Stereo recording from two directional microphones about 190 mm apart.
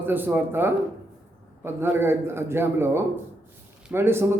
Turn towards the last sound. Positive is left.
turn(degrees=-10)  # may be behind; listen again after turning